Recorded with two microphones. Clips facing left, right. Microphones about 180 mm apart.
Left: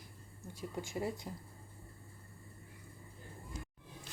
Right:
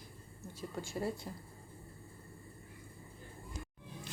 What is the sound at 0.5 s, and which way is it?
Speech, 15° left (ahead or behind).